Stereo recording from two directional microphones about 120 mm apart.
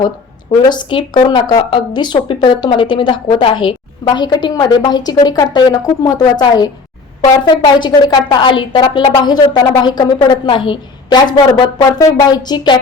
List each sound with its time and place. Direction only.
0.6 s speech: 40° left (ahead or behind)